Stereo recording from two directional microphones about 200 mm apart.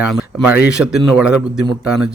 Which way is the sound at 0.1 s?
5° right (ahead or behind).